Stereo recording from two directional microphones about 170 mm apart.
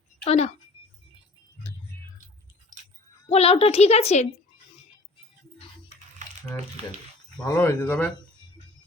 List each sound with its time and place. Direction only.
0.3 s a woman's voice: 40° left (ahead or behind)
3.2 s a woman's voice: 35° left (ahead or behind)
7.4 s speech: 15° left (ahead or behind)